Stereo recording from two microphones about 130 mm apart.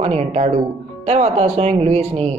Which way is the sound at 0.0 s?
55° right (ahead or behind).